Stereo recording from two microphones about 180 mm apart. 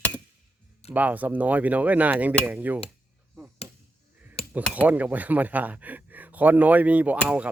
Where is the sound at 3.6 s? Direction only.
15° right (ahead or behind).